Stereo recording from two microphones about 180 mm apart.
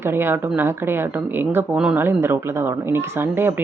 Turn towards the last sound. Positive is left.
turn(degrees=-15)  # may be behind; listen again after turning